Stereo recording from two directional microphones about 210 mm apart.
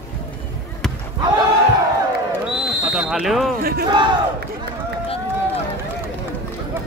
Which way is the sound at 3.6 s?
45° right (ahead or behind).